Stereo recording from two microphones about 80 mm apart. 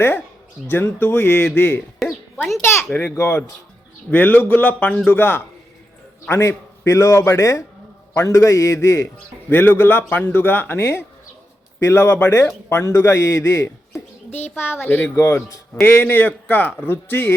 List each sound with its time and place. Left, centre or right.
0.7 s speech: left
2.0 s a sound: centre
2.9 s a man's voice: left
15.1 s a man's voice: left
15.7 s speech: left